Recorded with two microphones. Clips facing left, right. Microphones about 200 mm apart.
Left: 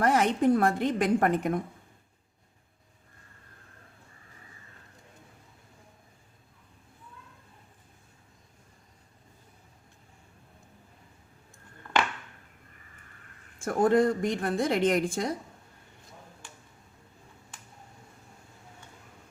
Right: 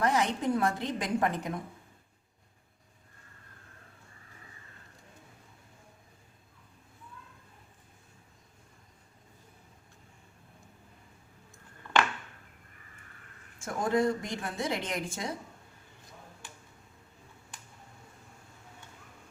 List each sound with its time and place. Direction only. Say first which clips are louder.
0.0 s a woman's voice: left 5 dB; 55° left (ahead or behind)
13.6 s a woman's voice: left 6 dB; 55° left (ahead or behind)